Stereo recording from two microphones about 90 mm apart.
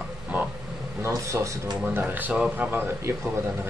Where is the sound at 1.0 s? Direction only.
35° right (ahead or behind).